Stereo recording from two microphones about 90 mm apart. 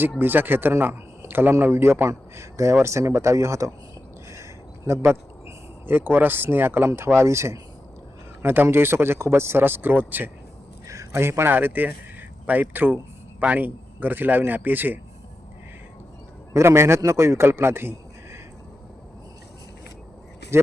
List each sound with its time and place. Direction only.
0.2 s speech: 20° right (ahead or behind)
4.9 s speech: 30° right (ahead or behind)
10.8 s speech: 35° right (ahead or behind)
16.6 s speech: 30° right (ahead or behind)
20.5 s speech: 30° right (ahead or behind)